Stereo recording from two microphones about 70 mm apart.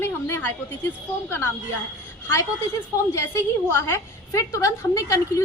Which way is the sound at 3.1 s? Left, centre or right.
Left.